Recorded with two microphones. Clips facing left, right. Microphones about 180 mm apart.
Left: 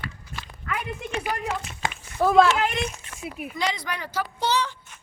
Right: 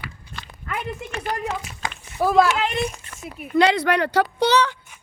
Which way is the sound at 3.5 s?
65° right (ahead or behind).